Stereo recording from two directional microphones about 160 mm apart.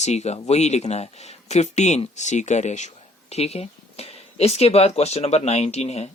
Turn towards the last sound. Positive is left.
turn(degrees=40)  # may be behind; listen again after turning